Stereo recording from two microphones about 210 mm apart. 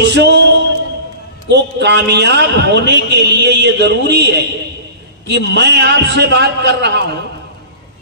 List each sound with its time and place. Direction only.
0.0 s speech: 55° right (ahead or behind)
1.5 s a man's voice: 55° right (ahead or behind)